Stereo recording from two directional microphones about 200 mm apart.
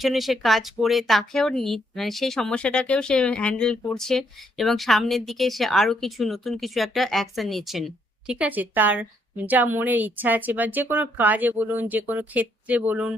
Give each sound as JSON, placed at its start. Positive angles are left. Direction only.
{"t": 0.0, "sound": "speech", "side_deg": 0}